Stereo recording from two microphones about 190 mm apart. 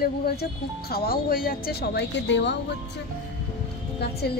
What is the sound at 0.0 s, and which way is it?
Speech, 55° left (ahead or behind).